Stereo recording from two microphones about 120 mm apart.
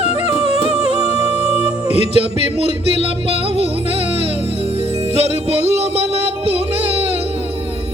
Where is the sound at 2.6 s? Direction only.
65° left (ahead or behind).